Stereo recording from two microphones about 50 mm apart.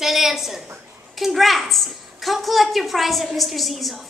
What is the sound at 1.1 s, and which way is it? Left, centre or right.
A woman's voice, centre.